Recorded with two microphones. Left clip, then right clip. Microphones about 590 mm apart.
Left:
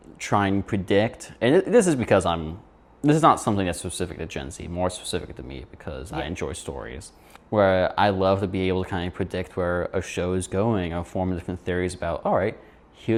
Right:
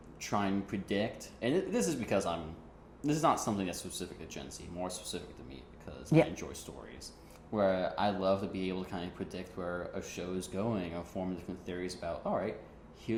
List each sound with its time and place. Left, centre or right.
0.3 s speech: left